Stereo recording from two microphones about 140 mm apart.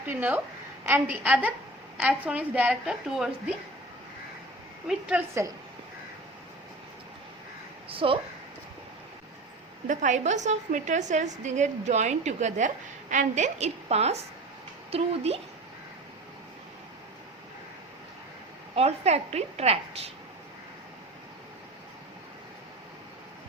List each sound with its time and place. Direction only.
0.1 s a woman's voice: 15° right (ahead or behind)
4.9 s a woman's voice: 5° right (ahead or behind)
7.9 s speech: 40° right (ahead or behind)
9.8 s a woman's voice: 65° right (ahead or behind); by 15.4 s 45° right (ahead or behind)
18.8 s a woman's voice: 50° right (ahead or behind)